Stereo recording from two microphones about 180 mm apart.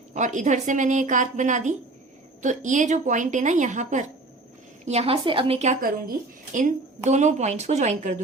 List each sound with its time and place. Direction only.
0.1 s a woman's voice: 45° right (ahead or behind)